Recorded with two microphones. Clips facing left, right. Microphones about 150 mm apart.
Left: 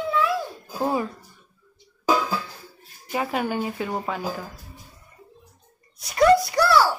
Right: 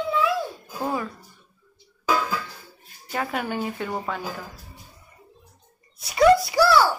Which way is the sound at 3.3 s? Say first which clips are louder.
Left 2 dB; 5° left (ahead or behind).